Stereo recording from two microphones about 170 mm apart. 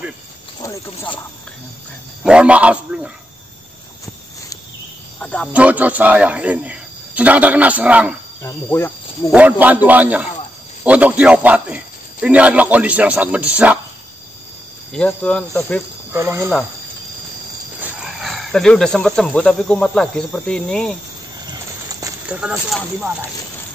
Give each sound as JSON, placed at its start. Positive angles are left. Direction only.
{"t": 2.2, "sound": "a man's voice", "side_deg": -5}
{"t": 5.2, "sound": "speech", "side_deg": 5}
{"t": 5.5, "sound": "a man's voice", "side_deg": -10}
{"t": 8.4, "sound": "speech", "side_deg": 15}
{"t": 9.3, "sound": "a man's voice", "side_deg": -10}
{"t": 14.9, "sound": "speech", "side_deg": 5}
{"t": 16.1, "sound": "a man's voice", "side_deg": -15}
{"t": 17.7, "sound": "speech", "side_deg": -5}
{"t": 22.3, "sound": "speech", "side_deg": -5}